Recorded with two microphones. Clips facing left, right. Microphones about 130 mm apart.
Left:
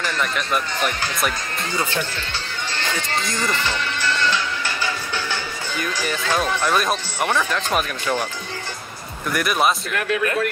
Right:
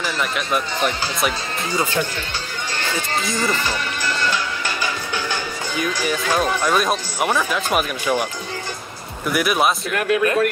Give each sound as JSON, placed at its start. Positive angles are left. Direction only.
{"t": 0.0, "sound": "speech", "side_deg": -5}
{"t": 3.3, "sound": "speech", "side_deg": -10}
{"t": 4.3, "sound": "music", "side_deg": -15}
{"t": 5.8, "sound": "speech", "side_deg": -10}
{"t": 9.3, "sound": "speech", "side_deg": -5}
{"t": 9.9, "sound": "speech", "side_deg": -25}